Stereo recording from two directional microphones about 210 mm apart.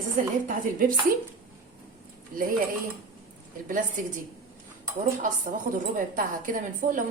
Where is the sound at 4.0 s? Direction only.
40° right (ahead or behind).